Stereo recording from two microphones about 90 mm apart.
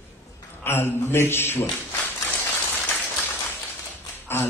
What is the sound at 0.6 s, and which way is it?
A man's voice, 25° left (ahead or behind).